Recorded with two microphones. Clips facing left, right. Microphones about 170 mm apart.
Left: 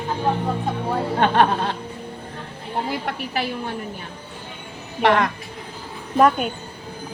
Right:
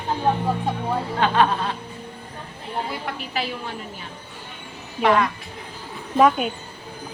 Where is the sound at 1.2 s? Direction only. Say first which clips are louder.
Left 2 dB; 60° left (ahead or behind).